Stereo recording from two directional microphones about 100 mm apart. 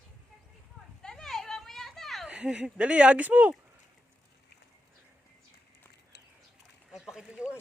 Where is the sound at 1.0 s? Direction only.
5° left (ahead or behind).